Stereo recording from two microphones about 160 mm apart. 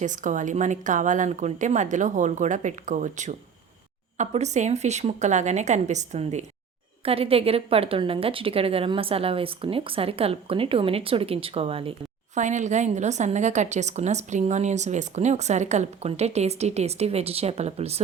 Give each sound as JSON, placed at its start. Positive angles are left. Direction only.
{"t": 0.0, "sound": "a woman's voice", "side_deg": -50}
{"t": 12.4, "sound": "a woman's voice", "side_deg": -50}